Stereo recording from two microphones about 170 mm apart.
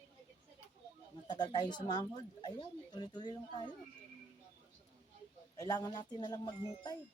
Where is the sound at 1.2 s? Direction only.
25° left (ahead or behind).